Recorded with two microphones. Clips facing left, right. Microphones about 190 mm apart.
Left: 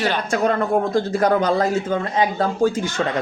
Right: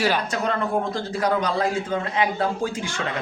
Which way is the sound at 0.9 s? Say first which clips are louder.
Left 6 dB; 45° left (ahead or behind).